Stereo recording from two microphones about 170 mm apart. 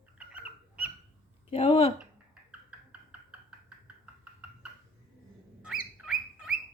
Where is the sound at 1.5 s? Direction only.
35° left (ahead or behind).